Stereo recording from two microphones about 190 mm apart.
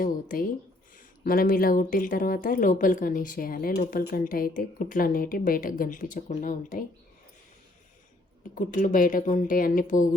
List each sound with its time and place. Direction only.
0.0 s speech: 50° left (ahead or behind)
8.5 s speech: 45° left (ahead or behind)